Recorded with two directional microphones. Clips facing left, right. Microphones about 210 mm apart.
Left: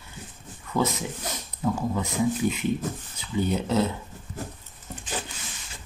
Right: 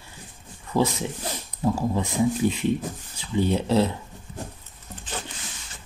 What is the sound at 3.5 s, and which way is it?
Speech, 30° right (ahead or behind).